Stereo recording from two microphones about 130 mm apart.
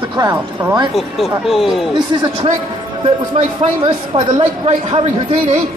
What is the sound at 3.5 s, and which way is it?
Speech, 45° right (ahead or behind).